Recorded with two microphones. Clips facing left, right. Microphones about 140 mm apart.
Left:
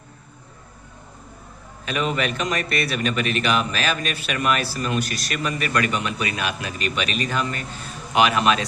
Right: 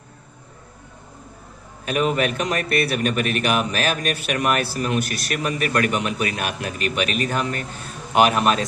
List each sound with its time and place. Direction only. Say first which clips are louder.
1.8 s a man's voice: right 3 dB; 50° right (ahead or behind)